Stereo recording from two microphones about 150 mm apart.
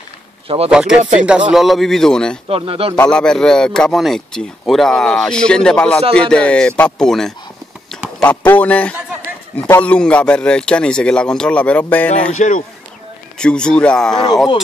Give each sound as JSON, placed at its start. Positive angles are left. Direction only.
{"t": 0.7, "sound": "speech", "side_deg": -5}
{"t": 2.4, "sound": "speech", "side_deg": -40}
{"t": 3.0, "sound": "a man's voice", "side_deg": 5}
{"t": 12.3, "sound": "speech", "side_deg": 55}
{"t": 13.4, "sound": "speech", "side_deg": 5}
{"t": 14.1, "sound": "speech", "side_deg": 30}